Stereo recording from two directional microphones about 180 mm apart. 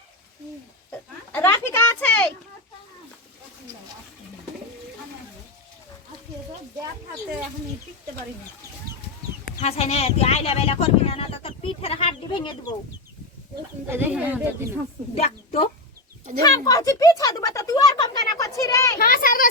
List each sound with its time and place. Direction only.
0.9 s a sound: 10° left (ahead or behind)
9.6 s speech: 35° left (ahead or behind)
13.8 s speech: 10° right (ahead or behind)
15.2 s a woman's voice: 30° left (ahead or behind)
16.4 s speech: 20° left (ahead or behind)
18.9 s a child's voice: 50° left (ahead or behind)